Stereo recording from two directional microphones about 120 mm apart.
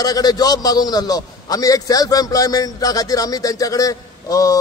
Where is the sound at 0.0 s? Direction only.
30° left (ahead or behind).